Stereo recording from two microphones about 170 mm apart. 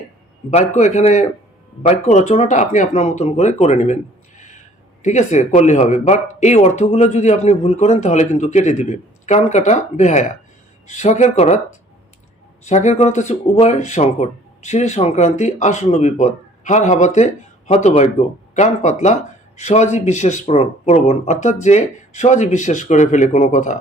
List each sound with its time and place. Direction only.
0.8 s speech: 40° left (ahead or behind)
4.4 s a sound: 45° left (ahead or behind)
5.0 s speech: 45° left (ahead or behind)
12.6 s speech: 45° left (ahead or behind)